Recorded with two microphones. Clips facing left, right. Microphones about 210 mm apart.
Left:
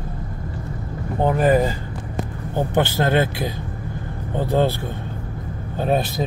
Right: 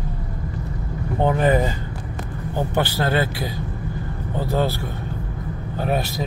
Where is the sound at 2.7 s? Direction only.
20° left (ahead or behind).